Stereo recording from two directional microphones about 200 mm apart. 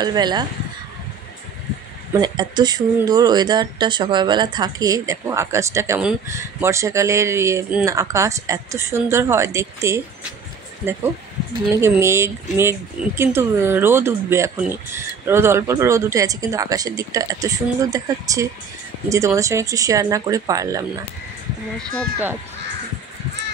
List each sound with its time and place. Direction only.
0.0 s speech: 20° right (ahead or behind)
2.1 s a woman's voice: 20° right (ahead or behind)